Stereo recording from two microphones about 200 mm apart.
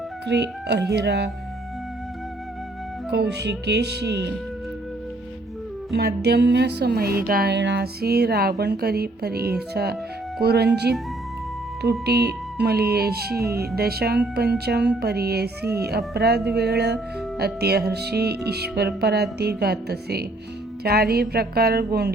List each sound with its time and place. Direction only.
0.3 s speech: 55° right (ahead or behind)
3.1 s speech: 55° right (ahead or behind)
5.9 s music: 55° right (ahead or behind)
10.4 s speech: 55° right (ahead or behind)
11.8 s music: 55° right (ahead or behind)